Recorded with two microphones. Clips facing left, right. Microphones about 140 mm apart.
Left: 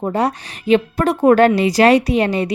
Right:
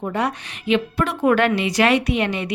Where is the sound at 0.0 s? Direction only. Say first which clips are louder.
Left 5 dB; 35° left (ahead or behind).